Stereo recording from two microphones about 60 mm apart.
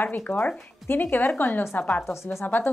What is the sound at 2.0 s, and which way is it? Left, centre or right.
Speech, left.